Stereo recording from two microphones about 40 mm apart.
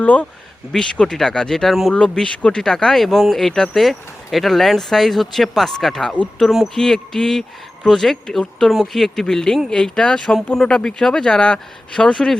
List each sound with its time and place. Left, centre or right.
0.0 s speech: left
0.7 s speech: centre
1.9 s speech: left; by 3.1 s centre
3.1 s speech: centre
3.3 s speech: centre
3.8 s speech: centre
9.2 s speech: centre
12.1 s speech: centre